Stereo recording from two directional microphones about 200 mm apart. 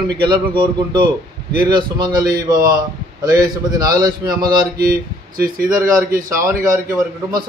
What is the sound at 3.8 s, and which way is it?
Speech, 20° right (ahead or behind).